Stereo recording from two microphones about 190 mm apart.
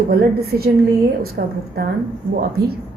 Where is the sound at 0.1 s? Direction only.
55° right (ahead or behind).